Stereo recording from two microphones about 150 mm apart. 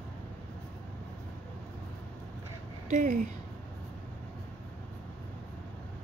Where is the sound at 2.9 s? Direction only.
55° right (ahead or behind).